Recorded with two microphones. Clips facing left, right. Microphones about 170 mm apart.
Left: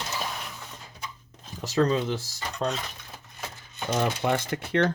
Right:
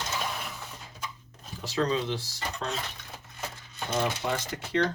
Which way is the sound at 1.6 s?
45° left (ahead or behind).